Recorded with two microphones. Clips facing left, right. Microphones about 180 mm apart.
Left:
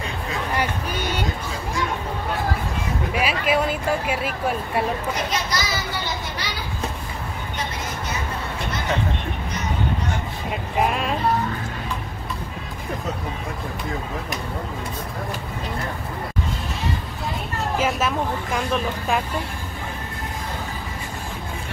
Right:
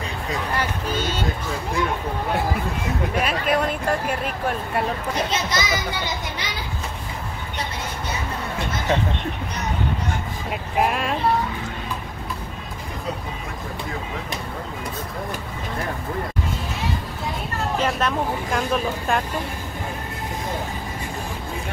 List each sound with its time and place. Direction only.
0.6 s a sound: 15° left (ahead or behind)
3.2 s speech: 5° left (ahead or behind)
5.3 s a child's voice: 20° right (ahead or behind)
10.5 s speech: centre (ahead or behind)
17.7 s speech: 5° left (ahead or behind)